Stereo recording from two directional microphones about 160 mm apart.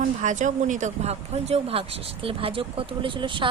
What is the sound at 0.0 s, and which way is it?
Speech, 50° right (ahead or behind).